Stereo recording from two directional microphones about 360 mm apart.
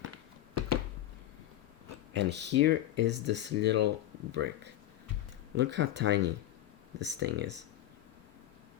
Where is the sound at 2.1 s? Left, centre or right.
Right.